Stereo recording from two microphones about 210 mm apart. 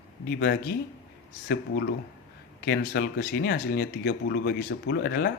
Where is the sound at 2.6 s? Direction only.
45° left (ahead or behind).